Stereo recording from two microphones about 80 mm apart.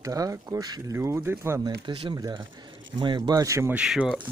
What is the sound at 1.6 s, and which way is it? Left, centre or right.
Speech, right.